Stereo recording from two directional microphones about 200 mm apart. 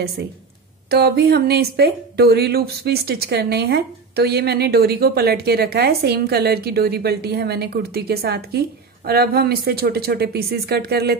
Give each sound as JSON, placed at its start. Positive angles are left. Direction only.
{"t": 0.8, "sound": "speech", "side_deg": -55}